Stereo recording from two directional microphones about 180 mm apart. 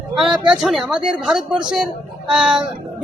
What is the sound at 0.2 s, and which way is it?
A man's voice, 5° right (ahead or behind).